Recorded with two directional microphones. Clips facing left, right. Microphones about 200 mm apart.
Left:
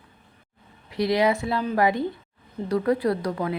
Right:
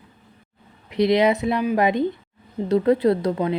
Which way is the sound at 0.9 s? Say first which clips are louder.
Right 4 dB; 20° right (ahead or behind).